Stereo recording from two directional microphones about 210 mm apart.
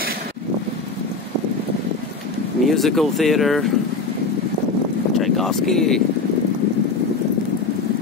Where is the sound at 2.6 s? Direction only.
Centre (ahead or behind).